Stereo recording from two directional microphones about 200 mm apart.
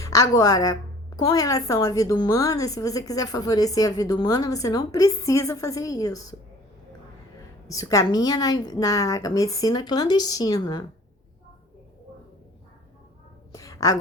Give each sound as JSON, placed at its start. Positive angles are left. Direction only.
{"t": 0.0, "sound": "a woman's voice", "side_deg": 15}
{"t": 7.8, "sound": "a woman's voice", "side_deg": 15}
{"t": 13.5, "sound": "a sound", "side_deg": 15}